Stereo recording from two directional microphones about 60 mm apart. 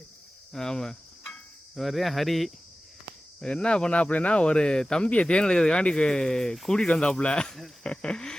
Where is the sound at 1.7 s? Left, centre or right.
Centre.